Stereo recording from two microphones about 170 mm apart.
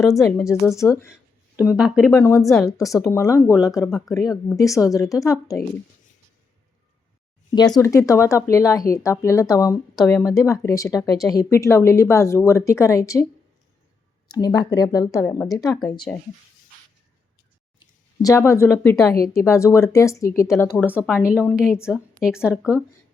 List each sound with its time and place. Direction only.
0.2 s speech: 15° left (ahead or behind)
1.1 s speech: 5° right (ahead or behind)
2.1 s a woman's voice: 15° left (ahead or behind)
7.8 s speech: 20° left (ahead or behind)
14.3 s a woman's voice: 20° left (ahead or behind)
16.1 s speech: 5° left (ahead or behind)
17.7 s speech: 20° left (ahead or behind)
20.8 s speech: 5° right (ahead or behind)